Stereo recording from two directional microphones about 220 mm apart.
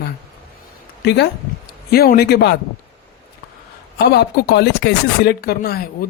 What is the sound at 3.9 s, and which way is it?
Speech, 50° left (ahead or behind).